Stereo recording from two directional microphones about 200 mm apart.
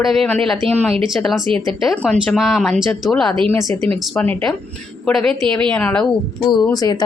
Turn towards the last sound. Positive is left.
turn(degrees=20)  # may be behind; listen again after turning